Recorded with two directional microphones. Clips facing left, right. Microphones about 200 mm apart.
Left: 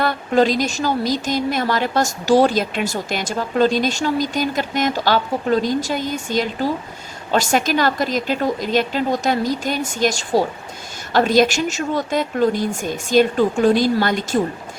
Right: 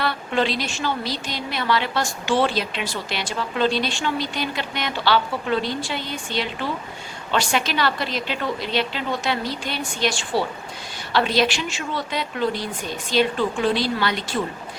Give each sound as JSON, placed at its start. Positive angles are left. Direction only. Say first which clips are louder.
{"t": 0.0, "sound": "a woman's voice", "louder": "left 6 dB", "side_deg": 45}